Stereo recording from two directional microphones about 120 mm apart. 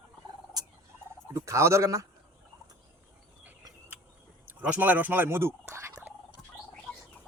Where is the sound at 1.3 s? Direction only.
25° right (ahead or behind).